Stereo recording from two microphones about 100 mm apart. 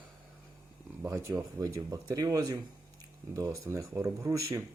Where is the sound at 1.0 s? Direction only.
30° right (ahead or behind).